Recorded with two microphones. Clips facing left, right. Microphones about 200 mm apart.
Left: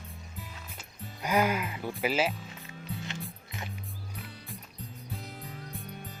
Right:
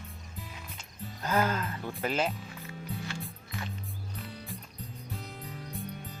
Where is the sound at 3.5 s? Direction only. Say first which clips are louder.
Right 3 dB; 20° left (ahead or behind).